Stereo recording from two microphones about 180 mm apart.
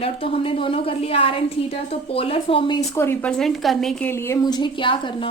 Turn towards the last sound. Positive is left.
turn(degrees=30)  # may be behind; listen again after turning